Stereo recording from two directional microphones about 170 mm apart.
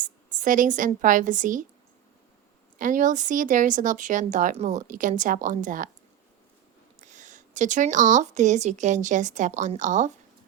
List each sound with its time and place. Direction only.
0.0 s a woman's voice: 50° right (ahead or behind)
2.7 s a woman's voice: 50° right (ahead or behind)
7.1 s a woman's voice: 45° right (ahead or behind)